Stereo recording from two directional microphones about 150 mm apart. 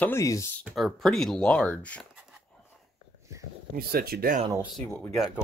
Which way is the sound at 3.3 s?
20° right (ahead or behind).